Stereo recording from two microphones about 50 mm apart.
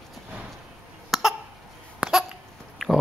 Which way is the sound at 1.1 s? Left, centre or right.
Centre.